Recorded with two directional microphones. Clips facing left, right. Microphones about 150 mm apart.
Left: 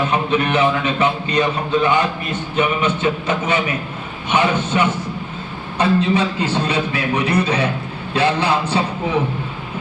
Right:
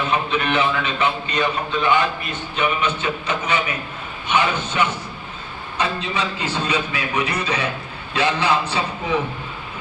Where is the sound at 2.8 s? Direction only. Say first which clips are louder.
Left 4 dB; 45° left (ahead or behind).